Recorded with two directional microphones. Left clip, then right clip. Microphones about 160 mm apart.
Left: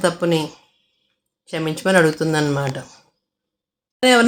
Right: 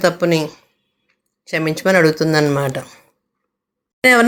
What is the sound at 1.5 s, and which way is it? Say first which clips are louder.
Speech: right 3 dB; 15° right (ahead or behind).